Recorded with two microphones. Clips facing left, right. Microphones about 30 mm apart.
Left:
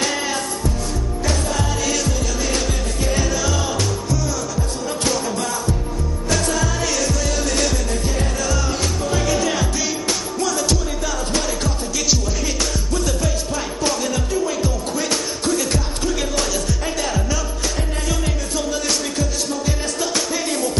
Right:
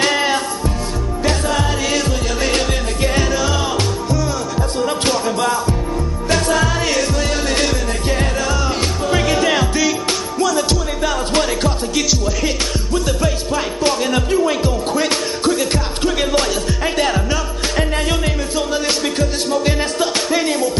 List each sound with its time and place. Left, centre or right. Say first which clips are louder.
0.1 s music: right 6 dB; right
2.0 s music: right 4 dB; right
3.2 s music: right 3 dB; right
9.1 s music: right 5 dB; right
11.3 s music: right 5 dB; right
12.9 s music: right 5 dB; right